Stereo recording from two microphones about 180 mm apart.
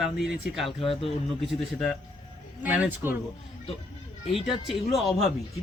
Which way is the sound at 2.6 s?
10° right (ahead or behind).